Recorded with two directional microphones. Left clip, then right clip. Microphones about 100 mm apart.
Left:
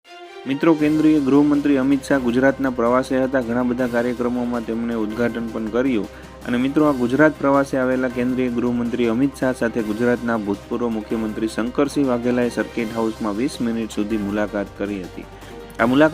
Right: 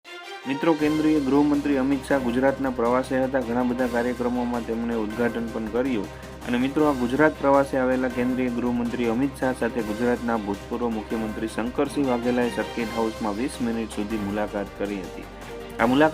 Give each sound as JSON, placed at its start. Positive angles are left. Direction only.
{"t": 0.4, "sound": "speech", "side_deg": 35}
{"t": 6.5, "sound": "speech", "side_deg": 35}
{"t": 11.4, "sound": "speech", "side_deg": 40}
{"t": 15.9, "sound": "speech", "side_deg": 35}